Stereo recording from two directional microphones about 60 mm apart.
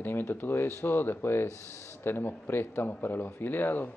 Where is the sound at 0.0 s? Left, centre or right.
Left.